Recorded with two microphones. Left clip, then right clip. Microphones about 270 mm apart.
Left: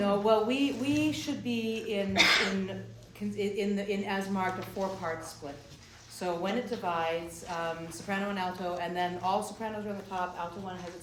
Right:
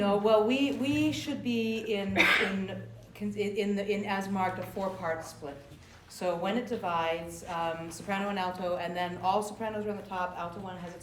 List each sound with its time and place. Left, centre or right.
0.0 s a woman's voice: centre
2.1 s speech: centre
3.3 s a woman's voice: centre
6.1 s a woman's voice: centre